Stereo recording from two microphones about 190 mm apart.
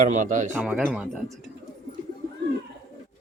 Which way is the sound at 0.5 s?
5° right (ahead or behind).